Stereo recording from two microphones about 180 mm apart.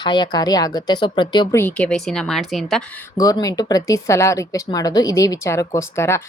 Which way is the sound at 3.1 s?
20° left (ahead or behind).